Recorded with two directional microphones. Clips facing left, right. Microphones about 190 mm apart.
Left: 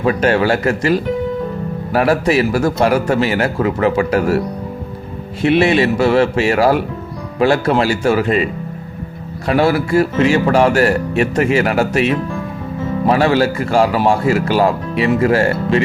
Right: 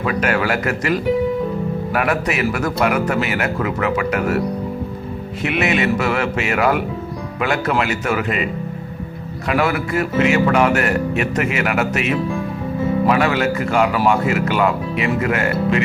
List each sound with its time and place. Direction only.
0.0 s speech: 30° left (ahead or behind)
5.4 s speech: 30° left (ahead or behind)
9.5 s speech: 30° left (ahead or behind)